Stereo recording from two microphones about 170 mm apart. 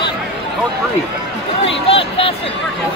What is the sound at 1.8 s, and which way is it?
Speech, 35° left (ahead or behind).